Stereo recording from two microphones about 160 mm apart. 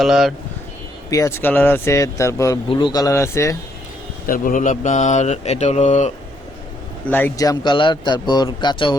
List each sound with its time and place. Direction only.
0.0 s speech: centre (ahead or behind)
1.1 s speech: 20° left (ahead or behind)
2.6 s speech: 30° left (ahead or behind)
4.3 s speech: 55° left (ahead or behind)
7.0 s speech: 10° left (ahead or behind); by 9.0 s 30° left (ahead or behind)